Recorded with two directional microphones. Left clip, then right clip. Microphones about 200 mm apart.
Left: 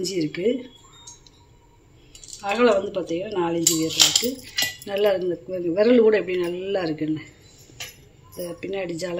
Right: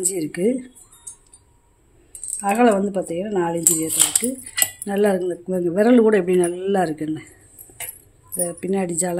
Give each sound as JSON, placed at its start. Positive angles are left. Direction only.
{"t": 0.0, "sound": "speech", "side_deg": -65}
{"t": 2.4, "sound": "speech", "side_deg": -60}
{"t": 8.5, "sound": "speech", "side_deg": -60}